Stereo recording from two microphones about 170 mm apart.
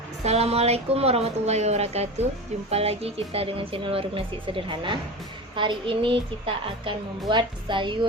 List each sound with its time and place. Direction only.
0.3 s a child's voice: 35° right (ahead or behind)